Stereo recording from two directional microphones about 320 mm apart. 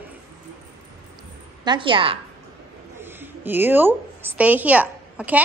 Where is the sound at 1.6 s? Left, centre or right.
Centre.